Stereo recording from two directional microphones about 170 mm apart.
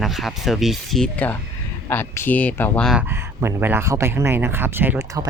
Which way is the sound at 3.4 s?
15° right (ahead or behind).